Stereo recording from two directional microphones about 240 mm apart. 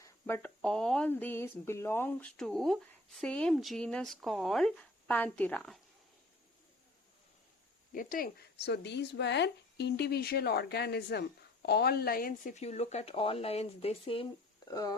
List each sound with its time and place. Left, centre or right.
0.0 s speech: centre
7.9 s speech: left; by 14.9 s centre